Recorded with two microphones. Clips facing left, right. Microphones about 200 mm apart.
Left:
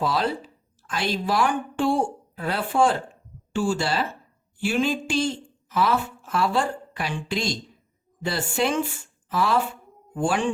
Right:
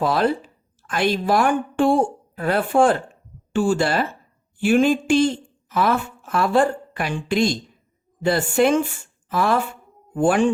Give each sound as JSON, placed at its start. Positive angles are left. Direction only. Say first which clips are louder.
{"t": 0.0, "sound": "a woman's voice", "louder": "right 5 dB", "side_deg": -55}